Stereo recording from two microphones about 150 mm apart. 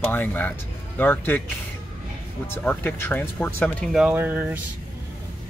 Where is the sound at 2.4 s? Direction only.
15° left (ahead or behind).